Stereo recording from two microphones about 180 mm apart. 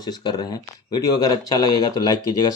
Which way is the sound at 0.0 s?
25° left (ahead or behind).